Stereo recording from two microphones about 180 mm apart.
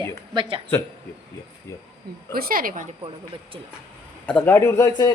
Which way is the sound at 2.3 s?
55° right (ahead or behind).